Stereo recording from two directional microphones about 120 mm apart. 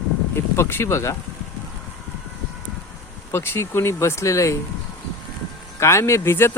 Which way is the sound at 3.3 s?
20° left (ahead or behind).